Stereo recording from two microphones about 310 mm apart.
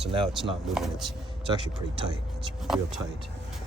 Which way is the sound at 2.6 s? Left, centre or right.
Centre.